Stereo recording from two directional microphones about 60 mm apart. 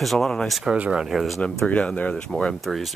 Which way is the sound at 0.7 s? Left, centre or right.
Centre.